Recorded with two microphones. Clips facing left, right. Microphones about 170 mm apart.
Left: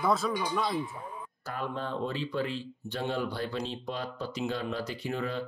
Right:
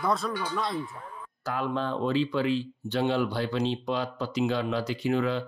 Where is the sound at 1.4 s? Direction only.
90° right.